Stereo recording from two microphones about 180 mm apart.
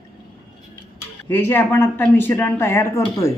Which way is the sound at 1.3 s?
15° left (ahead or behind).